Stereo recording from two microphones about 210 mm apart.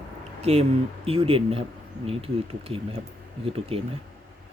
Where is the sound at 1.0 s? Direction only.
25° right (ahead or behind).